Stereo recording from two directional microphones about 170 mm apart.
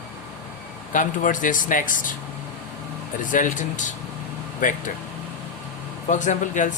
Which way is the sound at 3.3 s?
50° left (ahead or behind).